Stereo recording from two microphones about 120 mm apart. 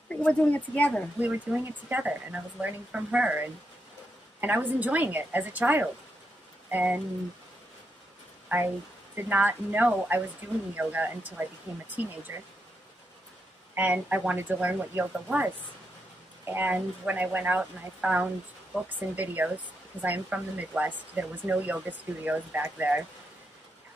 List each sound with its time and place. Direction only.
0.1 s speech: 10° left (ahead or behind)
1.2 s speech: 15° right (ahead or behind)
9.1 s speech: 15° right (ahead or behind)
13.7 s speech: 15° right (ahead or behind)